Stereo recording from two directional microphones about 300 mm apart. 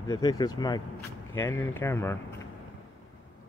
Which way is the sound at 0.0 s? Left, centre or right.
Centre.